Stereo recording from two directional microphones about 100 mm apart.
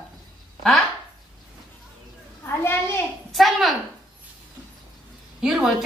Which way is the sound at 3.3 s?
Centre (ahead or behind).